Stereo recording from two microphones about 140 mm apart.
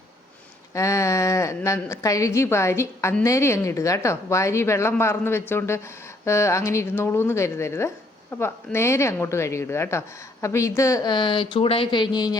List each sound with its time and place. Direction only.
0.7 s a woman's voice: 20° left (ahead or behind)